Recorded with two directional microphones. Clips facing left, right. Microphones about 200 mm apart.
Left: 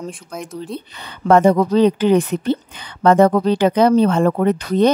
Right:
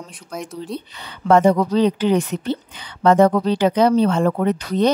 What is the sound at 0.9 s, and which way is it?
A woman's voice, 55° left (ahead or behind).